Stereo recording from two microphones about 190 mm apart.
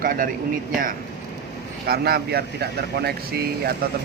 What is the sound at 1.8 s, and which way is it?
Speech, 55° right (ahead or behind).